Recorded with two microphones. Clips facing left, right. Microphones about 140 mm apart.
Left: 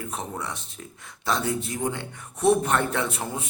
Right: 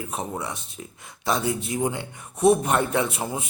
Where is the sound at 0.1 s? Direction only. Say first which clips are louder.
Right 2 dB; 10° right (ahead or behind).